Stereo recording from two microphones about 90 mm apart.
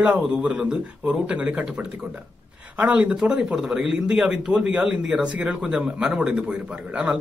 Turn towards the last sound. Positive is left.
turn(degrees=-10)  # may be behind; listen again after turning